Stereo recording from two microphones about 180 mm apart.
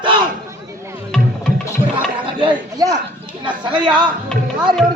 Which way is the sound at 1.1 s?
5° left (ahead or behind).